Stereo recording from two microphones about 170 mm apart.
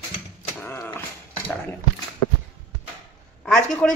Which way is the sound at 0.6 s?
15° left (ahead or behind).